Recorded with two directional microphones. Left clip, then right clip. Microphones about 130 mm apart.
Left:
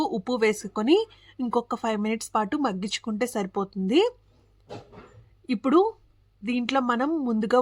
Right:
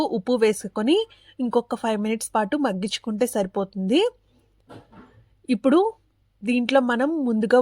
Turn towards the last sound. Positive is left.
turn(degrees=-30)  # may be behind; listen again after turning